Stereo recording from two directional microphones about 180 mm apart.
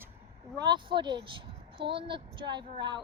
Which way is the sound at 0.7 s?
25° right (ahead or behind).